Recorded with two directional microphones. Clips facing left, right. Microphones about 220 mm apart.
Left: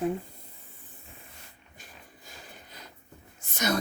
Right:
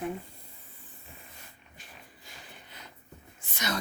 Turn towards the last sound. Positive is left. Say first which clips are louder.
# left 6 dB
turn(degrees=45)  # may be behind; listen again after turning